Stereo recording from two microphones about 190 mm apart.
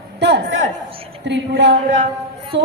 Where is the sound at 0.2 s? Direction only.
65° right (ahead or behind).